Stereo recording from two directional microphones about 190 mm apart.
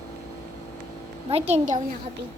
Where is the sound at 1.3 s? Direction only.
35° right (ahead or behind).